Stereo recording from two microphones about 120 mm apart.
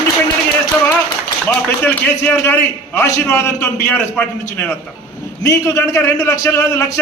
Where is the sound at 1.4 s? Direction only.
15° left (ahead or behind).